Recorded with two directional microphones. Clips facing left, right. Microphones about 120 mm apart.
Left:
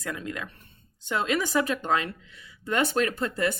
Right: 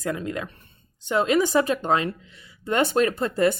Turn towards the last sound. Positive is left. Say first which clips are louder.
# right 6 dB
turn(degrees=-35)  # may be behind; listen again after turning